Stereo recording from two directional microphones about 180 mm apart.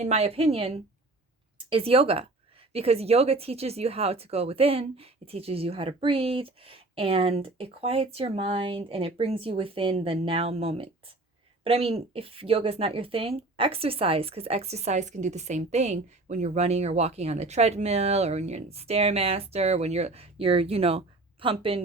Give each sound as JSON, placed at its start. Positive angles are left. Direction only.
{"t": 0.0, "sound": "speech", "side_deg": -35}